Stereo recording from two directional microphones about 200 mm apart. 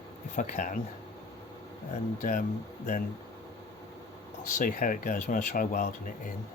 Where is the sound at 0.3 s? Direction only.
40° left (ahead or behind).